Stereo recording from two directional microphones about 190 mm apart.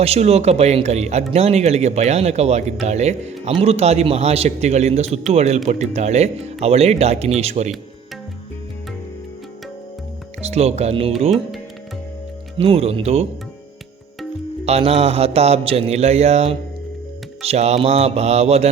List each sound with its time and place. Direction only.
0.0 s a man's voice: 35° right (ahead or behind)
10.4 s a man's voice: 35° right (ahead or behind)
12.5 s a man's voice: 30° right (ahead or behind)
14.6 s a man's voice: 35° right (ahead or behind)